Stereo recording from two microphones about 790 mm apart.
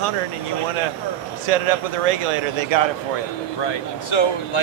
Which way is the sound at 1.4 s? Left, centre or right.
Right.